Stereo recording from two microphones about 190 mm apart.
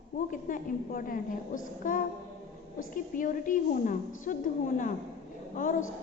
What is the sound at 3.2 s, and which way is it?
A woman's voice, 45° left (ahead or behind).